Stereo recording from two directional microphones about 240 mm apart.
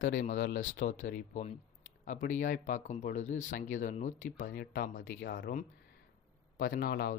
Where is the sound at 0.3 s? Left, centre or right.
Left.